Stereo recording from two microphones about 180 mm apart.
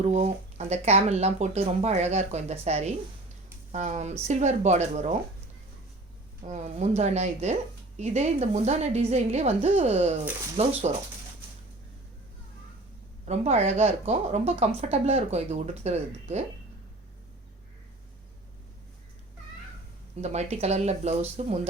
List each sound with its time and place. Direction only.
0.0 s speech: 40° right (ahead or behind)
6.4 s speech: 40° right (ahead or behind)
13.2 s speech: 40° right (ahead or behind)
20.2 s speech: 40° right (ahead or behind)